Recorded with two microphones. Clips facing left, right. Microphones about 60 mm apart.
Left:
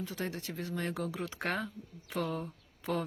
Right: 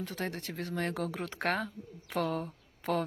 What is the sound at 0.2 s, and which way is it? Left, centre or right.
Speech, right.